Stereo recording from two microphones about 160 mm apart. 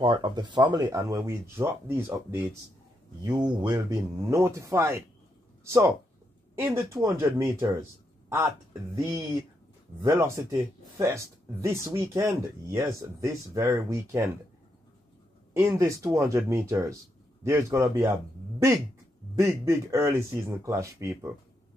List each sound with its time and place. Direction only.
0.0 s speech: 25° right (ahead or behind)
3.3 s speech: 25° right (ahead or behind)
6.8 s speech: 20° right (ahead or behind)
8.9 s speech: 15° right (ahead or behind)
15.5 s speech: 15° right (ahead or behind)
19.3 s speech: 15° right (ahead or behind)